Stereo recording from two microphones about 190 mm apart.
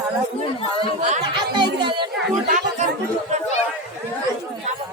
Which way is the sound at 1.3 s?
25° right (ahead or behind).